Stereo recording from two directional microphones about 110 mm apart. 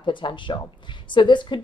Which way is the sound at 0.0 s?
45° left (ahead or behind).